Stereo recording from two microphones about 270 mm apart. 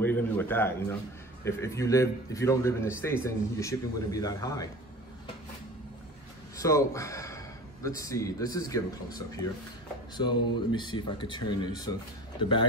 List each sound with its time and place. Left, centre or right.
0.0 s a man's voice: centre
6.6 s a man's voice: centre
10.1 s speech: centre